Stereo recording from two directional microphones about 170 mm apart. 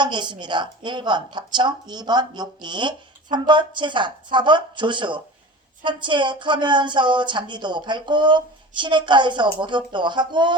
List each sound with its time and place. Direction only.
0.0 s a woman's voice: 25° right (ahead or behind)